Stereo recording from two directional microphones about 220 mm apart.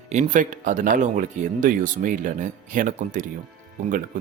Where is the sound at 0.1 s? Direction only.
35° right (ahead or behind).